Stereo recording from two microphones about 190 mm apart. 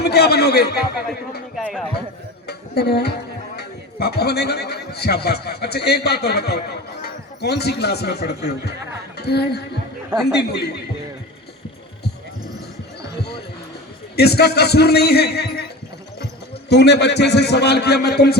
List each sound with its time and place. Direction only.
0.0 s a man's voice: 55° left (ahead or behind)
1.5 s speech: centre (ahead or behind)
2.5 s a man's voice: 60° left (ahead or behind)
10.2 s speech: centre (ahead or behind)
10.5 s a man's voice: 60° left (ahead or behind)
14.2 s a man's voice: 60° left (ahead or behind)